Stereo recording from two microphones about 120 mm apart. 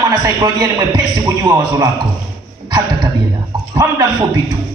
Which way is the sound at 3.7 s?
25° right (ahead or behind).